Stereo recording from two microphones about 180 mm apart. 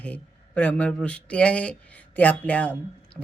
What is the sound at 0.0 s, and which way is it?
A woman's voice, 5° left (ahead or behind).